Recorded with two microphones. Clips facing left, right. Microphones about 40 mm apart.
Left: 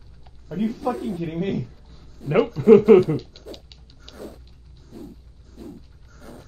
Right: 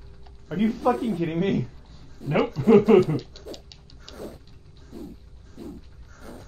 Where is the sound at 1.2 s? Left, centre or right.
Right.